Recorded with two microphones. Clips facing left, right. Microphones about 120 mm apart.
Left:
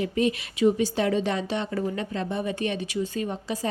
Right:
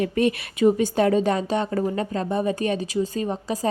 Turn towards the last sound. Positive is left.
turn(degrees=-40)  # may be behind; listen again after turning